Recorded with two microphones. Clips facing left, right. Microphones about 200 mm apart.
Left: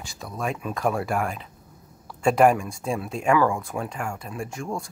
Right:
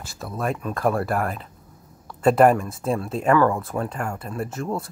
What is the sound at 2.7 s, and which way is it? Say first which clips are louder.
Speech: right 3 dB; centre (ahead or behind).